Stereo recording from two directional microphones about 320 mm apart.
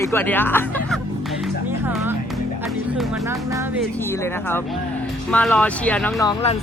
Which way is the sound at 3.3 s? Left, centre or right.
Centre.